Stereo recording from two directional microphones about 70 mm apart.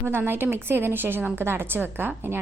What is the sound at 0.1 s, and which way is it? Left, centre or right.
A woman's voice, right.